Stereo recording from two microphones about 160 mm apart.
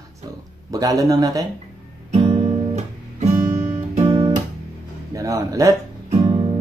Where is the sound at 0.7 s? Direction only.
20° right (ahead or behind).